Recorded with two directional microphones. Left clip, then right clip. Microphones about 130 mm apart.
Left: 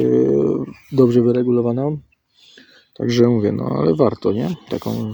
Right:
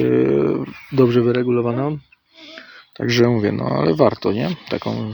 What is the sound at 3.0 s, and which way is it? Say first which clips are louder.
Speech: left 1 dB; 25° left (ahead or behind).